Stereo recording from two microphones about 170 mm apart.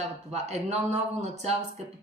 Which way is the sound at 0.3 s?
40° right (ahead or behind).